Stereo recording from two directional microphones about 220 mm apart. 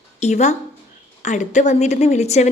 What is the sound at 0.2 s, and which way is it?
A woman's voice, 30° left (ahead or behind).